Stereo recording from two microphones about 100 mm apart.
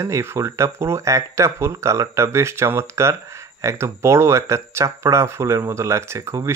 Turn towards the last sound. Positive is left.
turn(degrees=-30)  # may be behind; listen again after turning